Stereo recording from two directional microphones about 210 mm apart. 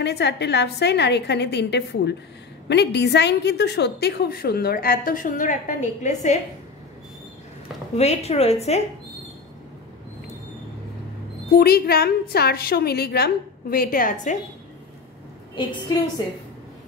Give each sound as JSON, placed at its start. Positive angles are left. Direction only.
{"t": 0.0, "sound": "a woman's voice", "side_deg": 55}
{"t": 7.9, "sound": "a woman's voice", "side_deg": 30}
{"t": 11.5, "sound": "a woman's voice", "side_deg": 45}